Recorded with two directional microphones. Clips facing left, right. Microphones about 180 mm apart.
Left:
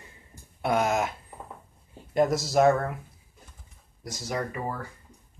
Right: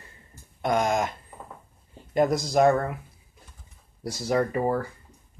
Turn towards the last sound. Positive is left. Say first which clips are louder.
# right 8 dB
turn(degrees=-35)  # may be behind; listen again after turning